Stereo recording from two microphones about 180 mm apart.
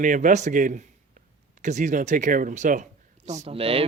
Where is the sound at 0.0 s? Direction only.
45° right (ahead or behind).